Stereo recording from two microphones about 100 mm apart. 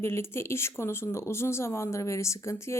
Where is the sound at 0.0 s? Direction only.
25° left (ahead or behind).